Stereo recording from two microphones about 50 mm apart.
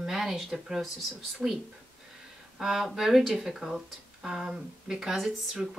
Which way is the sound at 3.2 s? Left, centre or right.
Centre.